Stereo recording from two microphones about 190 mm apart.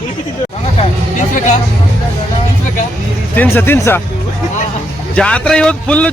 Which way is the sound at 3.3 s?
10° left (ahead or behind).